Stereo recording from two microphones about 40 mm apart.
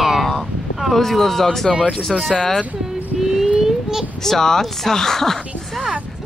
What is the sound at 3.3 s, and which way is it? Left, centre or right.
Speech, centre.